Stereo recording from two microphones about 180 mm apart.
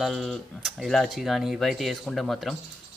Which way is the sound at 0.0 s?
Centre (ahead or behind).